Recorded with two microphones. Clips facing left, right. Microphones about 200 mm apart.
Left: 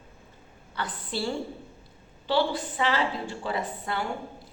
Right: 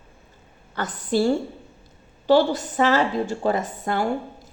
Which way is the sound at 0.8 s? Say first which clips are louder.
Right 10 dB; 45° right (ahead or behind).